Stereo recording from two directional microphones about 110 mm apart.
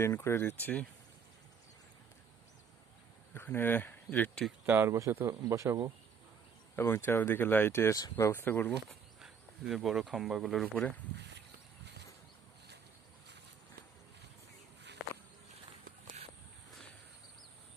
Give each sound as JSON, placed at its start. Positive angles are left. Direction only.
{"t": 0.0, "sound": "speech", "side_deg": 20}
{"t": 3.3, "sound": "speech", "side_deg": 20}
{"t": 4.6, "sound": "speech", "side_deg": -20}
{"t": 6.7, "sound": "speech", "side_deg": 20}
{"t": 8.1, "sound": "speech", "side_deg": 20}
{"t": 8.9, "sound": "speech", "side_deg": -5}